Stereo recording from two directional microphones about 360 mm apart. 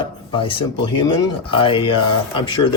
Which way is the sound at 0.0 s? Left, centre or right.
Centre.